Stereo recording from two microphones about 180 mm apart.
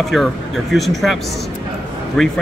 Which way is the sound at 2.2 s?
Centre (ahead or behind).